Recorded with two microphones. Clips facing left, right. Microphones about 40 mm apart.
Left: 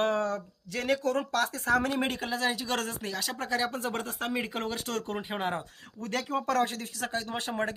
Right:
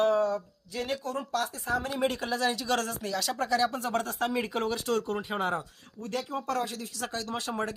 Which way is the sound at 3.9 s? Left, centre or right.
Centre.